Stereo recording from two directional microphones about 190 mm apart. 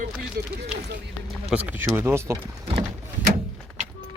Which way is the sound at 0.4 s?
50° right (ahead or behind).